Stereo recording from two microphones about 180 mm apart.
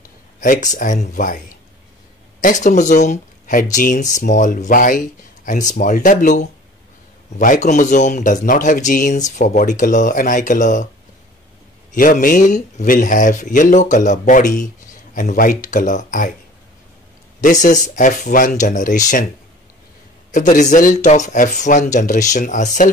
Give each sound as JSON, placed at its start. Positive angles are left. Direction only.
{"t": 0.4, "sound": "speech", "side_deg": 45}
{"t": 2.4, "sound": "speech", "side_deg": 45}
{"t": 11.9, "sound": "speech", "side_deg": 50}
{"t": 17.4, "sound": "speech", "side_deg": 45}
{"t": 20.3, "sound": "speech", "side_deg": 45}